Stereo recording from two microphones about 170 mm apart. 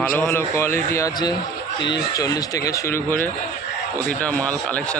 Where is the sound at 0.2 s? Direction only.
15° left (ahead or behind).